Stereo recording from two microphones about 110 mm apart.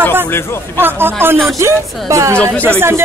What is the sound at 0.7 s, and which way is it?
Speech, 20° right (ahead or behind).